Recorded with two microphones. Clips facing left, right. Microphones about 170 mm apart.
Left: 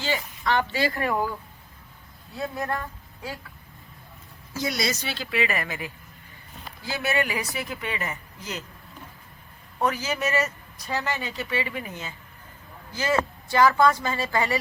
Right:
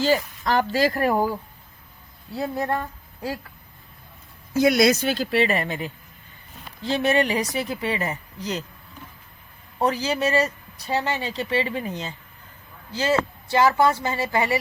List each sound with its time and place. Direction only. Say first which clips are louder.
0.0 s speech: right 7 dB; 40° right (ahead or behind)
4.5 s a woman's voice: right 11 dB; 55° right (ahead or behind); by 8.6 s 35° right (ahead or behind)
9.7 s speech: right 3 dB; 35° right (ahead or behind)